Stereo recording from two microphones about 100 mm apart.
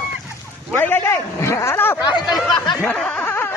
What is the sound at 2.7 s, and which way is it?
Snicker, 10° left (ahead or behind).